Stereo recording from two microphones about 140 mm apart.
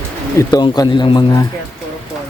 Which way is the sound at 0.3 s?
25° left (ahead or behind).